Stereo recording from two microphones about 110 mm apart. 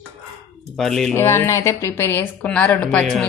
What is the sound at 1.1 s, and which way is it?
Speech, 25° left (ahead or behind).